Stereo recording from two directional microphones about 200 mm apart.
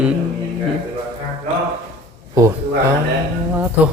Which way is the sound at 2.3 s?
15° right (ahead or behind).